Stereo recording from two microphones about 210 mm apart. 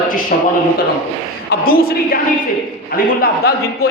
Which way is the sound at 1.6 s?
45° left (ahead or behind).